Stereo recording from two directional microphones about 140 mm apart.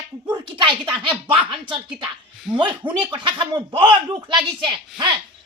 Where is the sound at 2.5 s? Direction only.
35° right (ahead or behind).